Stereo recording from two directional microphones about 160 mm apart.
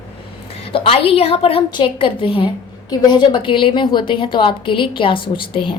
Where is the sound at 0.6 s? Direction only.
35° left (ahead or behind).